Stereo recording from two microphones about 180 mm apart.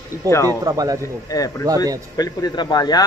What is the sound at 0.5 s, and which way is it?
Speech, 20° right (ahead or behind).